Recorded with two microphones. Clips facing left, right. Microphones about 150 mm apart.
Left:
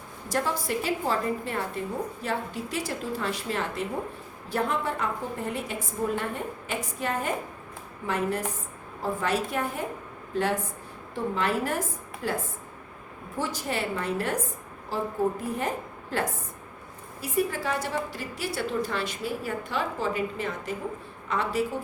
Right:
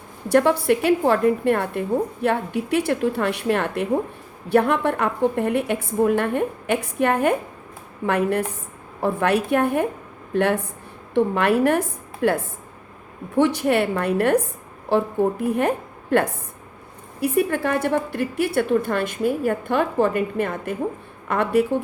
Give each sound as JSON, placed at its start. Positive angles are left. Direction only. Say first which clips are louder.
{"t": 0.3, "sound": "a woman's voice", "louder": "right 11 dB", "side_deg": -65}